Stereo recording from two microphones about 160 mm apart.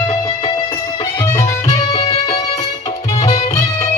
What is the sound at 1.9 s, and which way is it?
Music, 40° left (ahead or behind).